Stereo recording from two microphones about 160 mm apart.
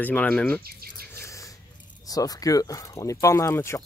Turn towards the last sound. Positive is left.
turn(degrees=15)  # may be behind; listen again after turning